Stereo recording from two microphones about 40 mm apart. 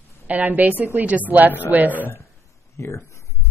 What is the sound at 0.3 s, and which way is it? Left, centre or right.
A woman's voice, right.